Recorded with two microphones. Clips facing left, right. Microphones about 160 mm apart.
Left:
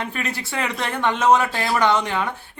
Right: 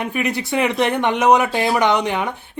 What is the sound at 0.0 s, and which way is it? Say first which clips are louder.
A man's voice: right 6 dB; 15° right (ahead or behind).